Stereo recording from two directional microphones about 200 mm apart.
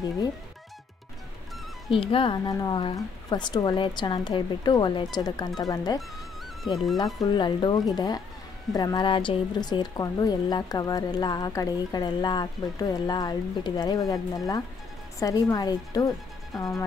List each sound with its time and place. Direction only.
2.0 s a woman's voice: 25° left (ahead or behind)
6.6 s speech: centre (ahead or behind)
7.2 s a woman's voice: 25° left (ahead or behind)